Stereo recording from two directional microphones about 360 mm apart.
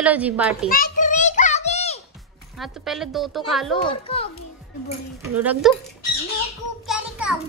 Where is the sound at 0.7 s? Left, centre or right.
Left.